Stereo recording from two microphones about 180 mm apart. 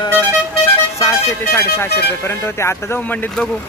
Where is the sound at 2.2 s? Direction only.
15° left (ahead or behind).